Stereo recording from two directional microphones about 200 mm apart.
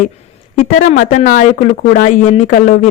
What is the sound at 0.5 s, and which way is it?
Speech, 35° left (ahead or behind).